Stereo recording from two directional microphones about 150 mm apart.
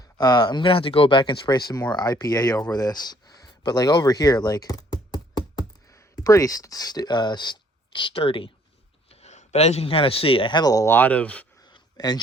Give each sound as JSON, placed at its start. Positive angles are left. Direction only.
{"t": 0.0, "sound": "speech", "side_deg": 25}
{"t": 9.0, "sound": "speech", "side_deg": 50}
{"t": 11.6, "sound": "a sound", "side_deg": 25}